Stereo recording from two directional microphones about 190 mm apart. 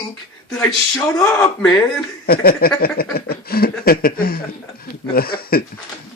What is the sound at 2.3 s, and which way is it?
Speech, 50° left (ahead or behind).